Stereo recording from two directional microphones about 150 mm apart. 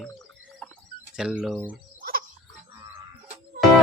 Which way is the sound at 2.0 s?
75° right (ahead or behind).